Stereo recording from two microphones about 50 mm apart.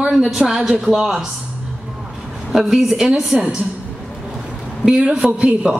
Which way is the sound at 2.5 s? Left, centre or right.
Centre.